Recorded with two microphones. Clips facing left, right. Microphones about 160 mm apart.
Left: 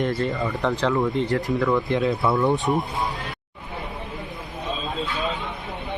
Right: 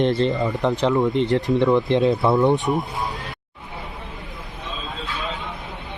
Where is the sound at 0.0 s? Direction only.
25° right (ahead or behind).